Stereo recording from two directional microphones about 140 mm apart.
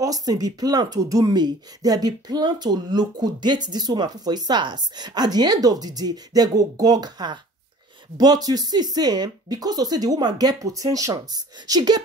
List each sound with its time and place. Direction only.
0.0 s speech: 25° right (ahead or behind)